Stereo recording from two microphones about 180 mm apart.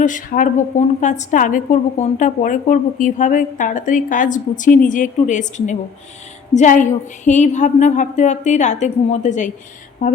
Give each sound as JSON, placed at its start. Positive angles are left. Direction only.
{"t": 0.0, "sound": "a woman's voice", "side_deg": 45}